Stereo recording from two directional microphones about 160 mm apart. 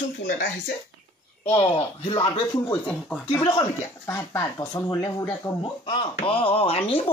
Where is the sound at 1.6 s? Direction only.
40° left (ahead or behind).